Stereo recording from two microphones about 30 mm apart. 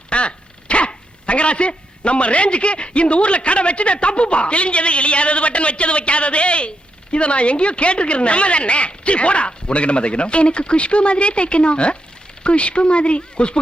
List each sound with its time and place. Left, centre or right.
0.1 s speech: left